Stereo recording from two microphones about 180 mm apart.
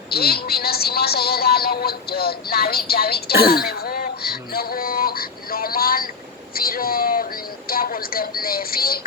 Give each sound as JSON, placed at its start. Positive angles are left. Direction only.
{"t": 0.1, "sound": "a woman's voice", "side_deg": 60}
{"t": 6.5, "sound": "a sound", "side_deg": 55}
{"t": 7.7, "sound": "a woman's voice", "side_deg": 55}